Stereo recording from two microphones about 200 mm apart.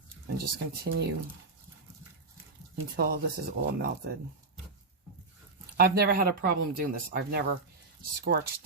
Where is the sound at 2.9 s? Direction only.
45° right (ahead or behind).